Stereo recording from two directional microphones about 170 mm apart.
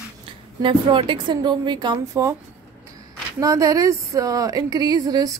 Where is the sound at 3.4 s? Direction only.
20° right (ahead or behind).